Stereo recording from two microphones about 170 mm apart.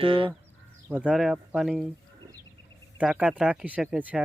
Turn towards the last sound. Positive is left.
turn(degrees=-5)  # may be behind; listen again after turning